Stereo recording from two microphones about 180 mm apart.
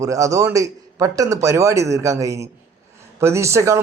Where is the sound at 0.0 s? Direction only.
20° right (ahead or behind).